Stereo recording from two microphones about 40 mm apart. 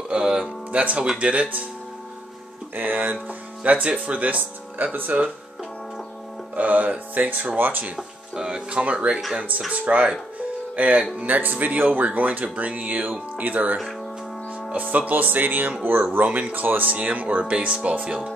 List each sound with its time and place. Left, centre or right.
0.1 s music: right
0.7 s speech: right
2.7 s speech: right
3.1 s speech: right
4.8 s speech: right
6.5 s speech: right
8.4 s speech: right
15.8 s speech: right
16.3 s speech: right
16.5 s speech: right
17.5 s speech: right